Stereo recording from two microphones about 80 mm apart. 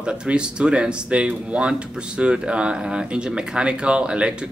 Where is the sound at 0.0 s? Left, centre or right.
Centre.